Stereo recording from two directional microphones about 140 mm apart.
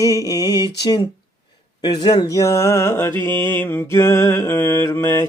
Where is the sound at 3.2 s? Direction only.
15° left (ahead or behind).